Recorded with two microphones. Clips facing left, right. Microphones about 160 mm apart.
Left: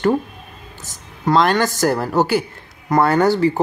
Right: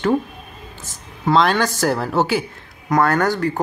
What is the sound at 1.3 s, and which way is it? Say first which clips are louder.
Speech: left 1 dB; 15° left (ahead or behind).